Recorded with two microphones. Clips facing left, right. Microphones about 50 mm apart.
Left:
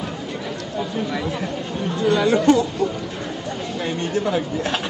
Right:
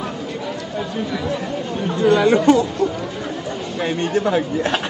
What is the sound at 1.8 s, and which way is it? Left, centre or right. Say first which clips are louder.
Speech: right 4 dB; centre.